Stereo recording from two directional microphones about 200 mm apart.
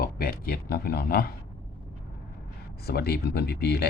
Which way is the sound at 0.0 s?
45° left (ahead or behind).